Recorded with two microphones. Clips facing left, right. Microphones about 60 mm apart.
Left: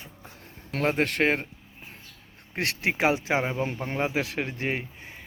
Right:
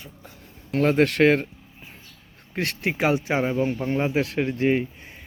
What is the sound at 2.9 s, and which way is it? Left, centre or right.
Speech, left.